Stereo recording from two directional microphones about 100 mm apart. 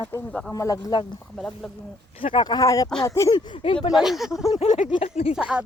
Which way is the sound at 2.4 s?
40° left (ahead or behind).